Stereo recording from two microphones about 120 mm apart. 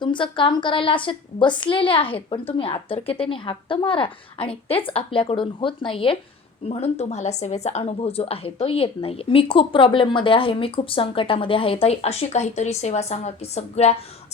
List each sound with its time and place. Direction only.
0.0 s a woman's voice: 40° left (ahead or behind)
6.7 s a woman's voice: 60° left (ahead or behind)